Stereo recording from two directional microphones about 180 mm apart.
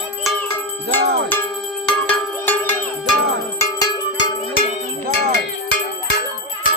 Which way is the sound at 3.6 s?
20° left (ahead or behind).